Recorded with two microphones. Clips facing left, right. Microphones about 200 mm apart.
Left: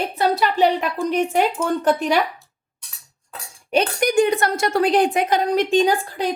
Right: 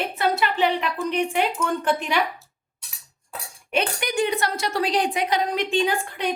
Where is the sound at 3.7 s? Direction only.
45° left (ahead or behind).